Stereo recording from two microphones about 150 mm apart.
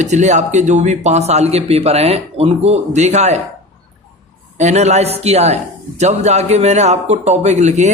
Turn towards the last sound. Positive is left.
turn(degrees=-50)  # may be behind; listen again after turning